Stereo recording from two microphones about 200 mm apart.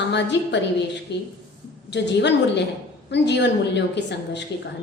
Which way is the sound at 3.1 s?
60° left (ahead or behind).